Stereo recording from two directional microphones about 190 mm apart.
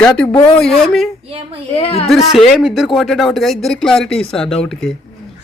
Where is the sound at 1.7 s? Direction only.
30° left (ahead or behind).